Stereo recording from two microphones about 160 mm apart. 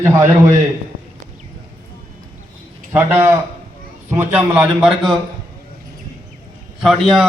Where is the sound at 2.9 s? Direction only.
15° right (ahead or behind).